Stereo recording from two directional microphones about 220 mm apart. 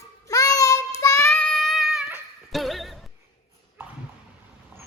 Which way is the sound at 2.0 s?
5° right (ahead or behind).